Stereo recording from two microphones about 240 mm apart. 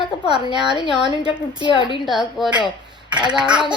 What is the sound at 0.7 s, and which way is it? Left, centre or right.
Speech, centre.